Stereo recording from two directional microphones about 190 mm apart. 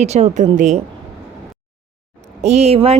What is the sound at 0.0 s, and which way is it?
Speech, 35° right (ahead or behind).